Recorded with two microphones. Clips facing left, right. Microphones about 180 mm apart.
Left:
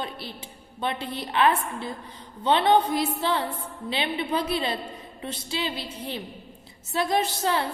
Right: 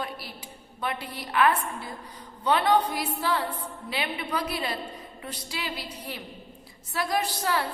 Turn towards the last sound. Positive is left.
turn(degrees=25)  # may be behind; listen again after turning